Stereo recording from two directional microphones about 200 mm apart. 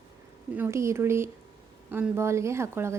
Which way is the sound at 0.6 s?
15° right (ahead or behind).